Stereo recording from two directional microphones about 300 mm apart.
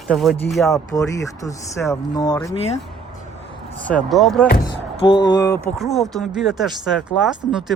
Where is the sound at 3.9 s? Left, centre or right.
Centre.